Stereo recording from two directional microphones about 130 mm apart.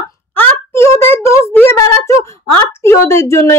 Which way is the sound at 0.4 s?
20° left (ahead or behind).